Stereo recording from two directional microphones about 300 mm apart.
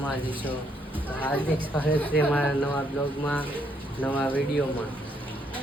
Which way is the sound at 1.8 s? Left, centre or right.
Centre.